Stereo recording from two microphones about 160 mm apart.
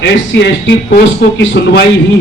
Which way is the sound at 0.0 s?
90° left.